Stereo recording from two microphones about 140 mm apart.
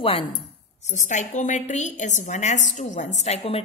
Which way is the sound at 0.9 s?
60° left (ahead or behind).